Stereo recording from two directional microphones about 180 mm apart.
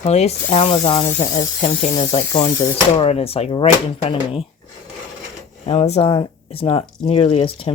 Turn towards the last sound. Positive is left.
turn(degrees=30)  # may be behind; listen again after turning